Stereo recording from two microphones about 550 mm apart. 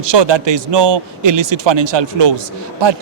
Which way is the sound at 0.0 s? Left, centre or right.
Right.